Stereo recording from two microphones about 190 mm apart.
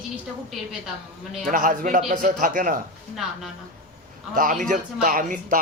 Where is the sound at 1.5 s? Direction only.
45° right (ahead or behind).